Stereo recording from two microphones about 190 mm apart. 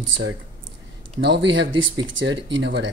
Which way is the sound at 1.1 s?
65° right (ahead or behind).